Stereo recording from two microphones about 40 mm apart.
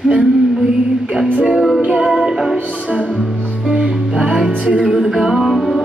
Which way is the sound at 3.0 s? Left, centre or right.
Left.